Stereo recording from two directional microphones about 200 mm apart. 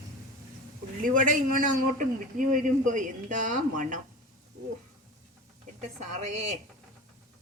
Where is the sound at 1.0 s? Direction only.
40° right (ahead or behind).